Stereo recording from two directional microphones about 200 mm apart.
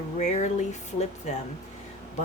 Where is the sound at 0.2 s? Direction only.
35° left (ahead or behind).